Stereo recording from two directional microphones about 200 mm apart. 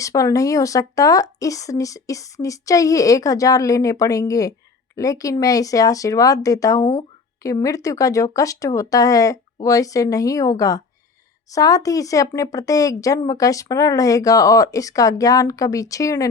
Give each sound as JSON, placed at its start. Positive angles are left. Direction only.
{"t": 0.0, "sound": "speech", "side_deg": 15}